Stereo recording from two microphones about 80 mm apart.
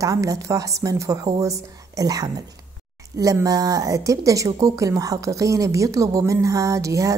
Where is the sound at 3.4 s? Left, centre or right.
Right.